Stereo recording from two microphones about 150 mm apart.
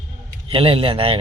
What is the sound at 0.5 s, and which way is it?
Speech, 40° right (ahead or behind).